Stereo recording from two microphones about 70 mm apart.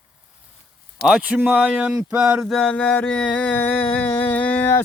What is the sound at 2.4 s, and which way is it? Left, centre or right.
Music, centre.